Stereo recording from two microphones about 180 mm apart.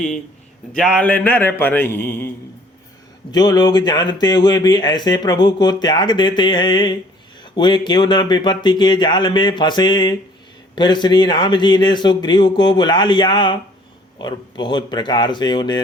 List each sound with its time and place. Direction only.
0.8 s speech: 5° left (ahead or behind)
3.3 s speech: 20° left (ahead or behind)